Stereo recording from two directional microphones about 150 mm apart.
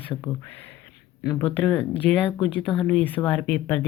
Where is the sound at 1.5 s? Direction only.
10° left (ahead or behind).